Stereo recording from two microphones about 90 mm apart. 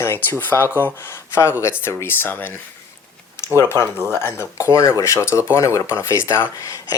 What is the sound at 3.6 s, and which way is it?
Speech, 30° left (ahead or behind).